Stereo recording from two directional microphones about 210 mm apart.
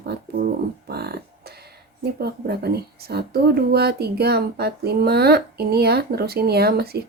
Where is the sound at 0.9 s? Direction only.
50° right (ahead or behind).